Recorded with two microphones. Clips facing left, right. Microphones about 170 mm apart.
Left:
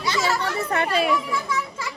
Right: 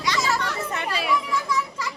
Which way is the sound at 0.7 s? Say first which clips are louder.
Left 6 dB; 55° left (ahead or behind).